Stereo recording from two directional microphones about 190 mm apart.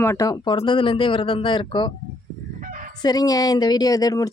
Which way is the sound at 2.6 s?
40° right (ahead or behind).